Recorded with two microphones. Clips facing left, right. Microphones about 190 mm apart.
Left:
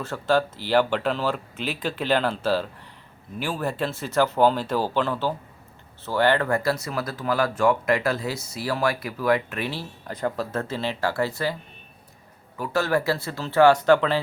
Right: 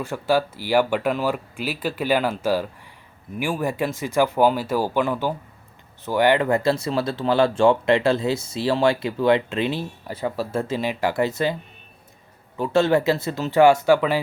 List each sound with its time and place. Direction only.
0.0 s speech: 10° right (ahead or behind)
10.1 s speech: 5° right (ahead or behind)
12.5 s speech: 25° right (ahead or behind); by 14.2 s 10° right (ahead or behind)